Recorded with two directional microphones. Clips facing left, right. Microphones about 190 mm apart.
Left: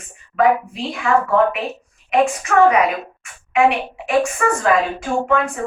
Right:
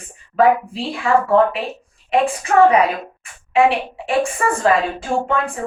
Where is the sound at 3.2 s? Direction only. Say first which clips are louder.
Left 1 dB; 30° right (ahead or behind).